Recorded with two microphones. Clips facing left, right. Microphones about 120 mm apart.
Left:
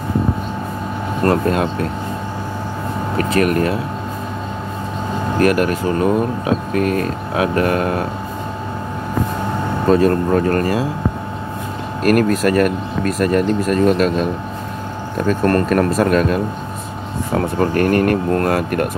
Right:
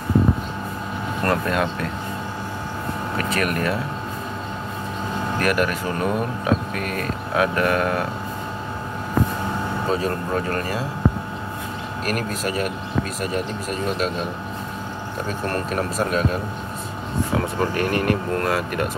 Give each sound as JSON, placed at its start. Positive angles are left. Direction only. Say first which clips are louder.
{"t": 1.2, "sound": "speech", "louder": "left 6 dB", "side_deg": 35}
{"t": 3.2, "sound": "speech", "louder": "left 8 dB", "side_deg": 40}
{"t": 5.4, "sound": "speech", "louder": "left 7 dB", "side_deg": 40}
{"t": 9.8, "sound": "speech", "louder": "left 12 dB", "side_deg": 60}
{"t": 12.0, "sound": "speech", "louder": "left 12 dB", "side_deg": 60}
{"t": 15.2, "sound": "speech", "louder": "left 11 dB", "side_deg": 60}
{"t": 17.3, "sound": "speech", "louder": "left 7 dB", "side_deg": 45}